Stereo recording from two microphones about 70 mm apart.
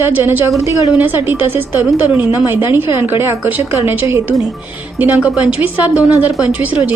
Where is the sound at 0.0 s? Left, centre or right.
Right.